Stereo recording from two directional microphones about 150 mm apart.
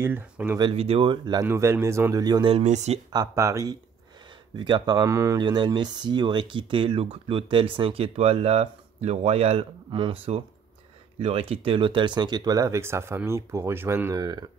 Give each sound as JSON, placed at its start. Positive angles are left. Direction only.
{"t": 0.0, "sound": "speech", "side_deg": -15}
{"t": 0.6, "sound": "speech", "side_deg": -35}
{"t": 1.5, "sound": "speech", "side_deg": -15}
{"t": 2.5, "sound": "speech", "side_deg": -50}
{"t": 3.1, "sound": "speech", "side_deg": -25}